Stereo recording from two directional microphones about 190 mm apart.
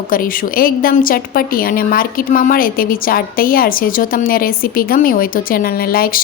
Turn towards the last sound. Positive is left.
turn(degrees=50)  # may be behind; listen again after turning